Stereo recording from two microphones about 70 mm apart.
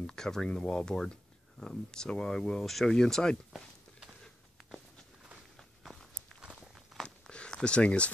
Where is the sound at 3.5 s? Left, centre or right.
Centre.